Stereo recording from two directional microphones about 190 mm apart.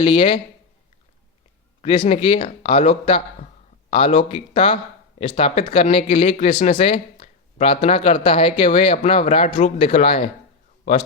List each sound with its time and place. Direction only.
0.0 s speech: 25° left (ahead or behind)
1.8 s speech: 30° left (ahead or behind)